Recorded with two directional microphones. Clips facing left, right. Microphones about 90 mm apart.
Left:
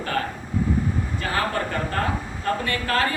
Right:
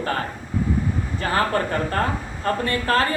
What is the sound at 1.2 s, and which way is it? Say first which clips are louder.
A man's voice: right 5 dB; 35° right (ahead or behind).